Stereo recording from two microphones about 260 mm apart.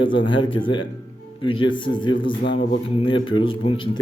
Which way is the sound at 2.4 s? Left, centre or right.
Left.